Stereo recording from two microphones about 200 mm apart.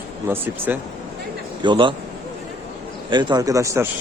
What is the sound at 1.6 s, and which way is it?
Speech, 25° right (ahead or behind).